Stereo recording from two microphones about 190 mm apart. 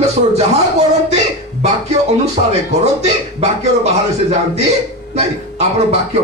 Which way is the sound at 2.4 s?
40° right (ahead or behind).